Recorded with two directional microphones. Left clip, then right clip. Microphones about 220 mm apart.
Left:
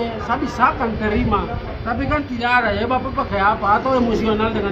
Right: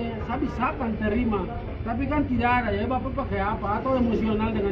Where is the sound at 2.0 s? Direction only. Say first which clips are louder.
Left 3 dB; 30° left (ahead or behind).